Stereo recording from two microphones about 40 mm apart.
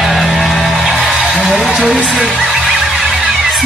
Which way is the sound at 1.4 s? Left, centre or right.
Centre.